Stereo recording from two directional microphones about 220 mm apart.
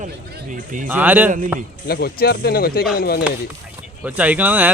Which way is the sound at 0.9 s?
10° right (ahead or behind).